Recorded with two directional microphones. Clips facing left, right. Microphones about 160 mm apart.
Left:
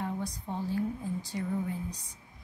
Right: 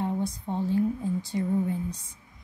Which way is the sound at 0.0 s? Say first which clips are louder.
Right 6 dB; 25° right (ahead or behind).